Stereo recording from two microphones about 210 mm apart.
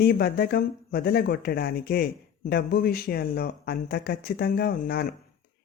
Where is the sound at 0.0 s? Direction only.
45° left (ahead or behind).